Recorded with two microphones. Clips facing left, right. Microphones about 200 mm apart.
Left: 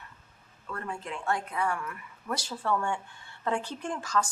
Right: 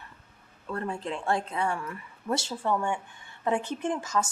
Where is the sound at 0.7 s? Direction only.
35° right (ahead or behind).